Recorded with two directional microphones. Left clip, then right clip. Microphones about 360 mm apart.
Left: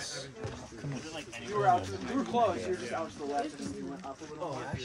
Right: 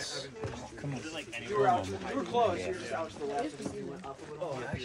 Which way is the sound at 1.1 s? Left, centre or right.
Left.